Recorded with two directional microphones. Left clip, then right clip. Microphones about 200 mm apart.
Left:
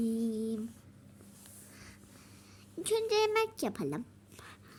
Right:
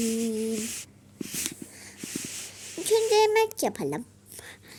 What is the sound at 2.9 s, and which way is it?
A child's voice, 15° left (ahead or behind).